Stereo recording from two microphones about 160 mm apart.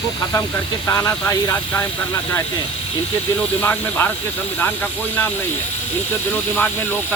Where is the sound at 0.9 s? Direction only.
20° left (ahead or behind).